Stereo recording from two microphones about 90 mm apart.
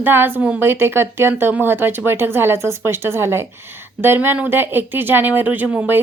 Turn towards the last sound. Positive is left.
turn(degrees=-15)  # may be behind; listen again after turning